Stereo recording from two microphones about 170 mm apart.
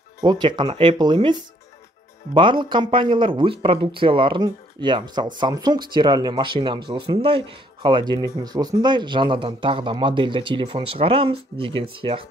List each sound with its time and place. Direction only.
0.2 s speech: 25° right (ahead or behind)